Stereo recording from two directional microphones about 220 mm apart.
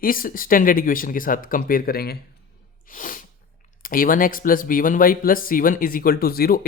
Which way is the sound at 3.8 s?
40° left (ahead or behind).